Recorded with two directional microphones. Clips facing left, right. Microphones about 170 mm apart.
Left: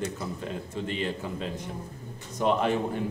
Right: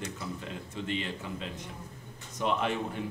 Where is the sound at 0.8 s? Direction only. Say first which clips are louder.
Left 3 dB; 40° left (ahead or behind).